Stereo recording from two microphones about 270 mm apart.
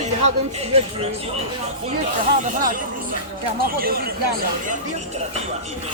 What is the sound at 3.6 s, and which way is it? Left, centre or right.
Speech, right.